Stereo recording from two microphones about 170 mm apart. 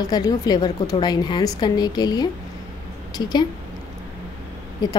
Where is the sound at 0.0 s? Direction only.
25° left (ahead or behind).